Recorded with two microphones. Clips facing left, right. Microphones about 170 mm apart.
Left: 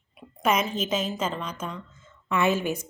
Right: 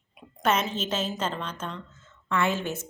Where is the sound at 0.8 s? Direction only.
10° left (ahead or behind).